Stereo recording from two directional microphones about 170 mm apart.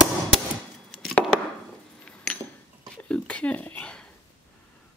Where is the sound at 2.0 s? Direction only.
5° left (ahead or behind).